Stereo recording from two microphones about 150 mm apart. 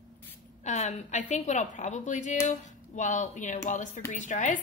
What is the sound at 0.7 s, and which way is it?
A woman's voice, 50° left (ahead or behind).